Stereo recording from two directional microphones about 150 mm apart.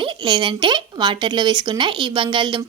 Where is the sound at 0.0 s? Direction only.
30° right (ahead or behind).